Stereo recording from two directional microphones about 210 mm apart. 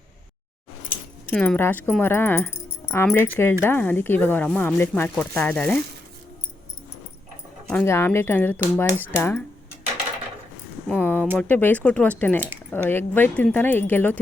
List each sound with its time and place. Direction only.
1.3 s speech: 5° left (ahead or behind)
7.7 s speech: 10° left (ahead or behind)
10.8 s speech: 10° left (ahead or behind)